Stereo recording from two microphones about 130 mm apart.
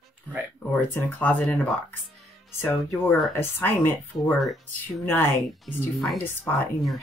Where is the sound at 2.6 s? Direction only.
15° left (ahead or behind).